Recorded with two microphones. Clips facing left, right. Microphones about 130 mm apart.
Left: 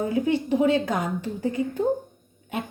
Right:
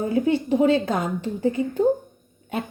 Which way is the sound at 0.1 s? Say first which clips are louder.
Right 2 dB; 30° right (ahead or behind).